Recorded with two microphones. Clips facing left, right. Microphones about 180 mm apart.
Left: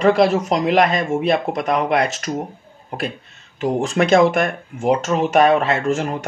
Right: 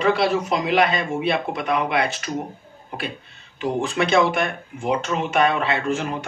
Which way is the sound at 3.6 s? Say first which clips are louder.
Left 4 dB; 40° left (ahead or behind).